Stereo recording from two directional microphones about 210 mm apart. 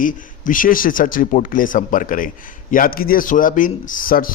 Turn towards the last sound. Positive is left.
turn(degrees=40)  # may be behind; listen again after turning